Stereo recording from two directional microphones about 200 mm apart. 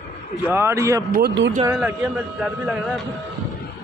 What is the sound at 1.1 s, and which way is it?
Speech, 60° right (ahead or behind).